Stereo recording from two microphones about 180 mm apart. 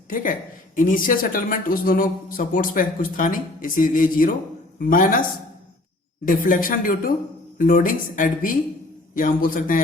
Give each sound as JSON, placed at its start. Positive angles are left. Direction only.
{"t": 0.1, "sound": "speech", "side_deg": 50}
{"t": 6.2, "sound": "speech", "side_deg": 50}